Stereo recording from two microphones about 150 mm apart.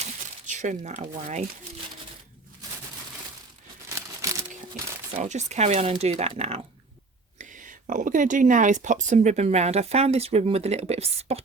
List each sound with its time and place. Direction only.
0.0 s crumpling: 55° right (ahead or behind)
3.8 s crumpling: 20° right (ahead or behind)
5.2 s speech: 50° right (ahead or behind)
7.3 s speech: 60° right (ahead or behind); by 11.4 s 45° right (ahead or behind)